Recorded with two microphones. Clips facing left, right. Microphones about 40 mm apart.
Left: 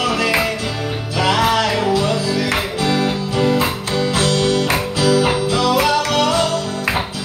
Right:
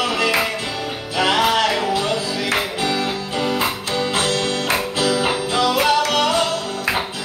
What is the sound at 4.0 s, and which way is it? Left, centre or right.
Music, right.